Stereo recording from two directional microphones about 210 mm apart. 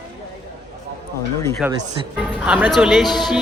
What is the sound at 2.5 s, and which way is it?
Speech, 5° right (ahead or behind).